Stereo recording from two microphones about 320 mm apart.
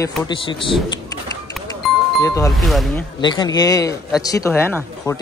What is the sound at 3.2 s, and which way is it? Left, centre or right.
Speech, centre.